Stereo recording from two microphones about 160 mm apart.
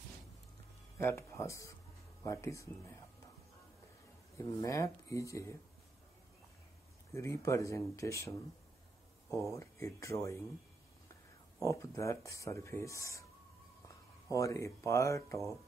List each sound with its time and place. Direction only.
0.9 s speech: 15° left (ahead or behind)
4.6 s speech: 20° left (ahead or behind)
7.1 s speech: 20° left (ahead or behind)
9.5 s speech: 20° left (ahead or behind)
11.6 s speech: 20° left (ahead or behind)